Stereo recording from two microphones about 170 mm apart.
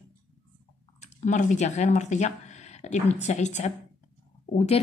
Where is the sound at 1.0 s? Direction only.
45° left (ahead or behind).